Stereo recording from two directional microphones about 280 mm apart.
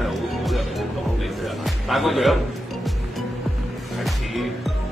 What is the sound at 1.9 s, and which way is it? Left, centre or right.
Speech, centre.